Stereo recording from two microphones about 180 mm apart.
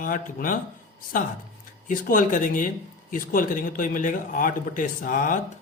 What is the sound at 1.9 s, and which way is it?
Speech, 50° left (ahead or behind).